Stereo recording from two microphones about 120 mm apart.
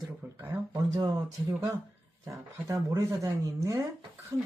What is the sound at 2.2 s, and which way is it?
Speech, 25° right (ahead or behind).